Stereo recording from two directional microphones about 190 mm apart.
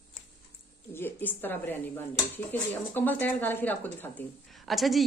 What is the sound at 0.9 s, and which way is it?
A woman's voice, 10° left (ahead or behind).